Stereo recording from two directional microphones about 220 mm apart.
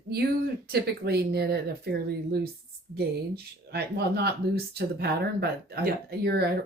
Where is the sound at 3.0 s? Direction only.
45° right (ahead or behind).